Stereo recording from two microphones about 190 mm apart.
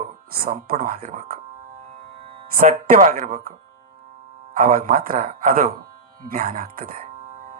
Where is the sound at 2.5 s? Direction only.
45° right (ahead or behind).